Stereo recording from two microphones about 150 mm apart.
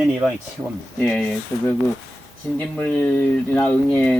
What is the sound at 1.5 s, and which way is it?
Speech, 20° left (ahead or behind).